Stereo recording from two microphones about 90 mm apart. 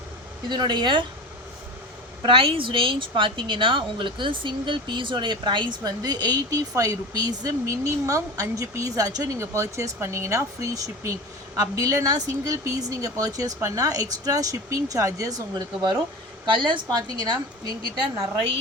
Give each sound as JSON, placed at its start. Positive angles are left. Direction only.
{"t": 0.4, "sound": "a woman's voice", "side_deg": -55}
{"t": 2.2, "sound": "a woman's voice", "side_deg": -75}
{"t": 16.5, "sound": "a woman's voice", "side_deg": -65}